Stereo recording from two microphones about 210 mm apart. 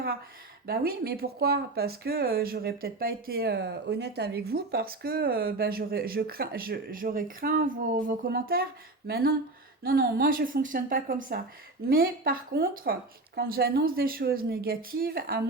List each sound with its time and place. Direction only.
0.7 s a woman's voice: 45° right (ahead or behind)